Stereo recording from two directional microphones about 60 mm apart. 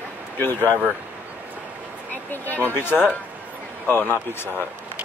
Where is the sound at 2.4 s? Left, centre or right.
Left.